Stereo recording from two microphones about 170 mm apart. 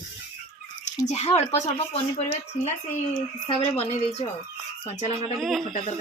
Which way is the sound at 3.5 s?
35° left (ahead or behind).